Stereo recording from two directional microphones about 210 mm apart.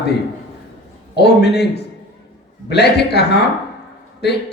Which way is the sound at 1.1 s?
50° left (ahead or behind).